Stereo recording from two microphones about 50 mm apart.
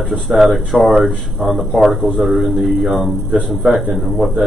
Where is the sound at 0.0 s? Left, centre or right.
Centre.